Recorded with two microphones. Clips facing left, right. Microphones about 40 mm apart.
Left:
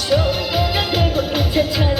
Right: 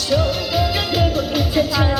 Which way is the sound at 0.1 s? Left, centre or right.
Left.